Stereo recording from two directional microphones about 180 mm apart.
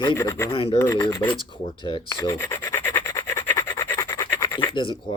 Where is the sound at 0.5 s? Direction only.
30° left (ahead or behind).